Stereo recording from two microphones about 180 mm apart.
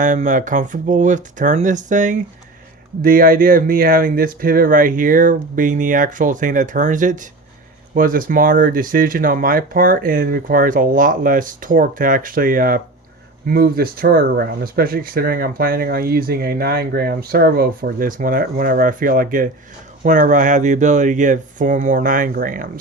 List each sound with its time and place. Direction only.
0.0 s speech: 45° right (ahead or behind)